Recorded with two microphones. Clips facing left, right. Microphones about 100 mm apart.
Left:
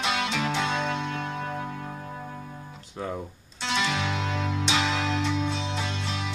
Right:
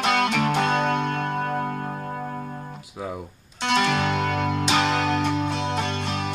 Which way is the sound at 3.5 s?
55° right (ahead or behind).